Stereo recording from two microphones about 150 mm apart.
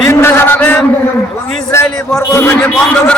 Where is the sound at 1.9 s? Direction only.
5° left (ahead or behind).